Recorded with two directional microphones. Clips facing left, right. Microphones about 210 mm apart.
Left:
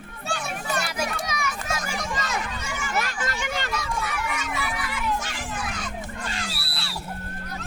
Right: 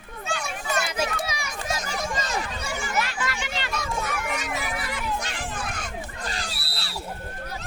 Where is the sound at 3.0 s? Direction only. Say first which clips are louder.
Left 1 dB; 45° left (ahead or behind).